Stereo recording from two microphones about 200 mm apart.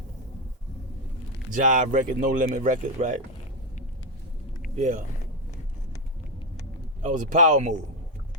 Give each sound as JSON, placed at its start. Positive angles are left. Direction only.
{"t": 1.5, "sound": "speech", "side_deg": -40}
{"t": 4.8, "sound": "speech", "side_deg": -35}
{"t": 7.0, "sound": "speech", "side_deg": -40}